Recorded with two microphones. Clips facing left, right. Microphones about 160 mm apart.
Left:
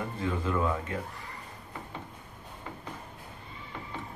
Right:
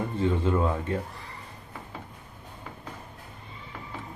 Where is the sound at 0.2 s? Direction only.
30° right (ahead or behind).